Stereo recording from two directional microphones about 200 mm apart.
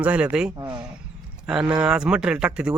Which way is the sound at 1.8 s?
5° right (ahead or behind).